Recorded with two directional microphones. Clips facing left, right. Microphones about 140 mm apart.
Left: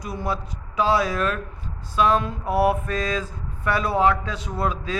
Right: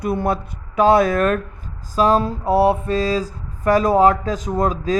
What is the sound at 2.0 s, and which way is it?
Mantra, 35° right (ahead or behind).